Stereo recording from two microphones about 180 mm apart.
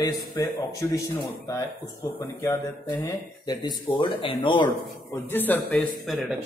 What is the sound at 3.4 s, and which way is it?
A man's voice, 25° left (ahead or behind).